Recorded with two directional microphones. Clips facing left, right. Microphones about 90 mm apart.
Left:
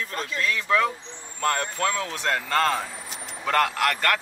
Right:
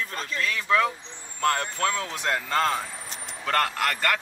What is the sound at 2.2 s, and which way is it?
Speech, 5° right (ahead or behind).